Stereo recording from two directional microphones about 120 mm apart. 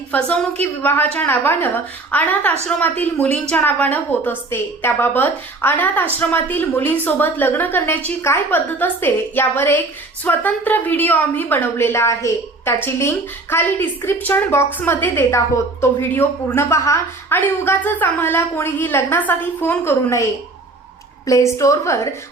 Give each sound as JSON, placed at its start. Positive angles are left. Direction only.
{"t": 0.1, "sound": "a woman's voice", "side_deg": 10}
{"t": 21.2, "sound": "a woman's voice", "side_deg": 25}